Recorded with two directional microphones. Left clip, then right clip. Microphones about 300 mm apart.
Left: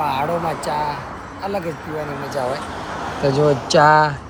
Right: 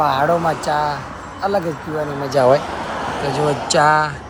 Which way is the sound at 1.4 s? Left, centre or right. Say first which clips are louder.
Right 6 dB; centre.